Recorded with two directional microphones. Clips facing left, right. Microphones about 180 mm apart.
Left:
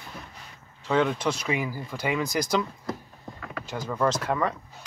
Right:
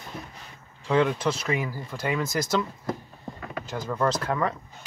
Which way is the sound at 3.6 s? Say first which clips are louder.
Left 1 dB; 10° left (ahead or behind).